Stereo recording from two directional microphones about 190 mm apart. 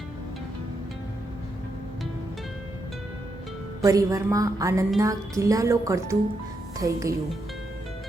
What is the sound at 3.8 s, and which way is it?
Speech, 15° right (ahead or behind).